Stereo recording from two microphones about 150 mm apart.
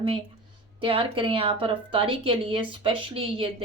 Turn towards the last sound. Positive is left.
turn(degrees=-35)  # may be behind; listen again after turning